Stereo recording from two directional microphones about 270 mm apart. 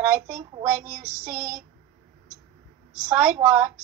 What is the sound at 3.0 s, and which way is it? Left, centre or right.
Speech, centre.